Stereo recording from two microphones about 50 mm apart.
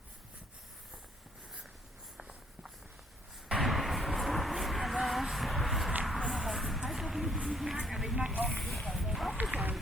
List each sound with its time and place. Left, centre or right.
2.1 s walk: centre
3.6 s vehicle: centre
6.1 s a sound: centre
9.3 s run: right